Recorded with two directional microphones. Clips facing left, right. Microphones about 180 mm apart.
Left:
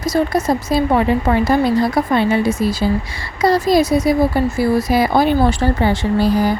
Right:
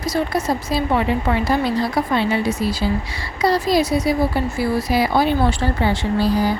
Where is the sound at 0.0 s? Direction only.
45° left (ahead or behind).